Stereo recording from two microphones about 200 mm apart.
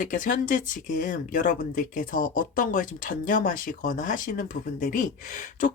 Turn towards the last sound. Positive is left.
turn(degrees=40)  # may be behind; listen again after turning